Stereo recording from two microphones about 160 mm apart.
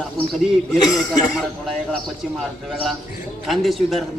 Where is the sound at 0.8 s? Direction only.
20° left (ahead or behind).